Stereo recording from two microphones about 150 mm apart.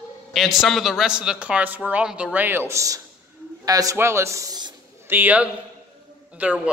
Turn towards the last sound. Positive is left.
turn(degrees=-10)  # may be behind; listen again after turning